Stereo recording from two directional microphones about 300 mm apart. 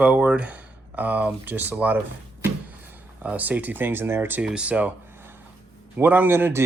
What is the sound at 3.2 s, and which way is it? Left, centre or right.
Speech, centre.